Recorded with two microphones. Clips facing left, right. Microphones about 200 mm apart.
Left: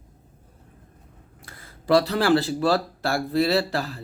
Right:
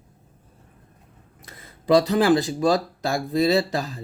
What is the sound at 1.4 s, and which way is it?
Speech, 20° right (ahead or behind).